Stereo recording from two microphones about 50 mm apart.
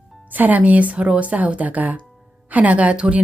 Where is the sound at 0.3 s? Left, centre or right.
Right.